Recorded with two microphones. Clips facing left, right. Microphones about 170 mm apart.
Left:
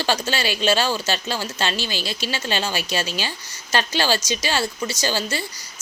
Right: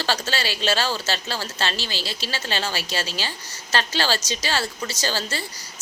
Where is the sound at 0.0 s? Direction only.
15° left (ahead or behind).